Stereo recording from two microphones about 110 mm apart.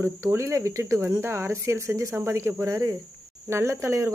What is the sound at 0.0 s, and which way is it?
Speech, 25° right (ahead or behind).